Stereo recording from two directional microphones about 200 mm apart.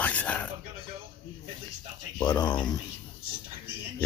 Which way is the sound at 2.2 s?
20° left (ahead or behind).